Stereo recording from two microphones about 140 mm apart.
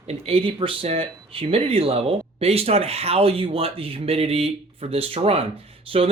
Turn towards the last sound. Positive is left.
turn(degrees=-40)  # may be behind; listen again after turning